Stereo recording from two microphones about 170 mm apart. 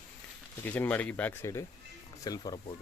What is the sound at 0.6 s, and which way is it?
Speech, 10° left (ahead or behind).